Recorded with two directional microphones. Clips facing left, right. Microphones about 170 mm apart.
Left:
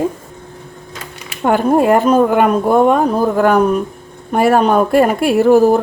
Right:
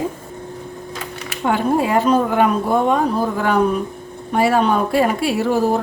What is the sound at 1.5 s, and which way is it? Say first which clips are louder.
A woman's voice: left 6 dB; 55° left (ahead or behind).